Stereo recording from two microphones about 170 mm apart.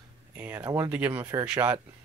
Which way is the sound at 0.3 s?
10° right (ahead or behind).